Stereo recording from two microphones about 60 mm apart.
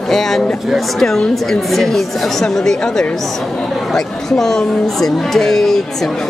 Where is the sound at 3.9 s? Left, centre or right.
Centre.